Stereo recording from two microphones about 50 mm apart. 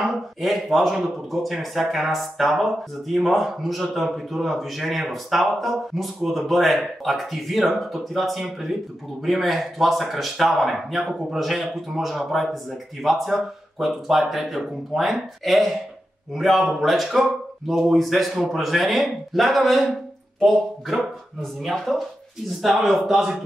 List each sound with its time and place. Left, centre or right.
0.1 s a man's voice: centre
21.4 s a man's voice: centre